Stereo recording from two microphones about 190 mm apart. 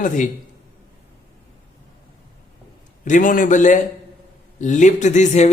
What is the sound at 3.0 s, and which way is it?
A man's voice, 45° left (ahead or behind).